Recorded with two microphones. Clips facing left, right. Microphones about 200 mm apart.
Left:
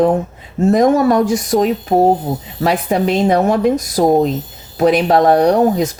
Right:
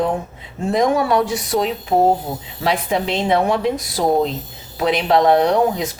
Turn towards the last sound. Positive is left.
turn(degrees=45)  # may be behind; listen again after turning